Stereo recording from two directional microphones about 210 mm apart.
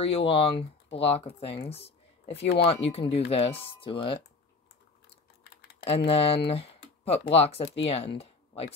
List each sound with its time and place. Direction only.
0.0 s speech: 25° left (ahead or behind)
5.9 s speech: 30° left (ahead or behind)